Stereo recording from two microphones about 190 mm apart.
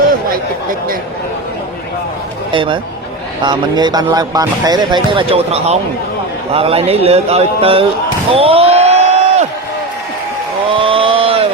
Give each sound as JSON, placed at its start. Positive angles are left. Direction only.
{"t": 0.0, "sound": "chatter", "side_deg": -50}
{"t": 2.5, "sound": "speech", "side_deg": -25}
{"t": 8.3, "sound": "slam", "side_deg": -30}
{"t": 10.7, "sound": "a sound", "side_deg": -30}